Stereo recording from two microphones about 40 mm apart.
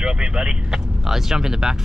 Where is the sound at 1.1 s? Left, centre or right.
Centre.